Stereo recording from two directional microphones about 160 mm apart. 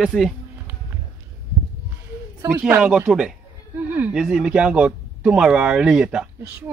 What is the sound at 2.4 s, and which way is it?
A man's voice, 10° right (ahead or behind).